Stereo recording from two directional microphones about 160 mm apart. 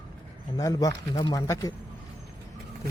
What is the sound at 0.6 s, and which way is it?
Speech, 20° left (ahead or behind).